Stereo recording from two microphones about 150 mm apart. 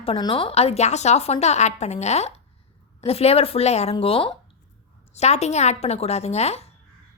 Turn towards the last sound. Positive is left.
turn(degrees=45)  # may be behind; listen again after turning